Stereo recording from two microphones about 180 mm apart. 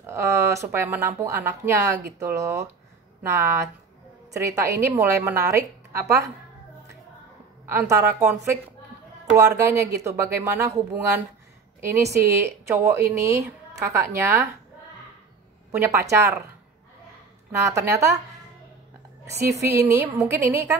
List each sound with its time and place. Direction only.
0.0 s speech: 15° right (ahead or behind)
7.9 s speech: 15° right (ahead or behind)
11.8 s speech: 15° right (ahead or behind)
15.7 s speech: 15° right (ahead or behind)
17.5 s speech: 15° right (ahead or behind)
19.2 s a woman's voice: 15° right (ahead or behind)